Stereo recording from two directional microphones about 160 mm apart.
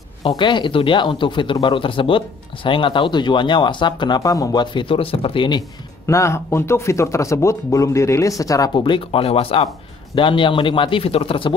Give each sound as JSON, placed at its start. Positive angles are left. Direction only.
{"t": 0.4, "sound": "speech", "side_deg": 30}
{"t": 6.0, "sound": "speech", "side_deg": 20}